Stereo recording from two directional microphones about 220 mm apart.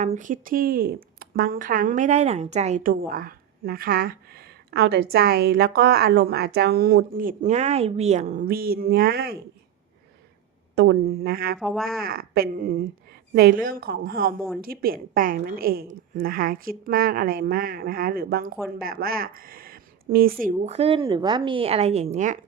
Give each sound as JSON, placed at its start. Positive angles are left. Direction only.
{"t": 0.0, "sound": "speech", "side_deg": -35}
{"t": 10.8, "sound": "speech", "side_deg": -50}
{"t": 11.6, "sound": "speech", "side_deg": 0}
{"t": 12.0, "sound": "speech", "side_deg": -45}
{"t": 20.4, "sound": "a woman's voice", "side_deg": -30}